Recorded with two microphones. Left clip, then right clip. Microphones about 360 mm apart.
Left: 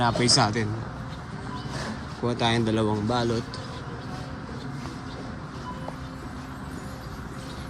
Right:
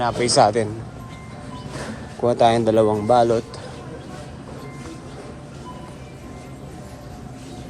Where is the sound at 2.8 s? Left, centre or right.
Right.